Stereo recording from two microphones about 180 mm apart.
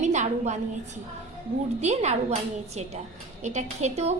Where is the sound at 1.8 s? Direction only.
40° right (ahead or behind).